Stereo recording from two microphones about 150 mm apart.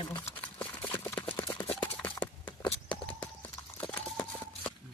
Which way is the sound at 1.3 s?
20° left (ahead or behind).